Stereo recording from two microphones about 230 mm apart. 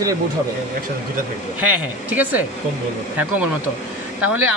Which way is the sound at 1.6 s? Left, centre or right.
Centre.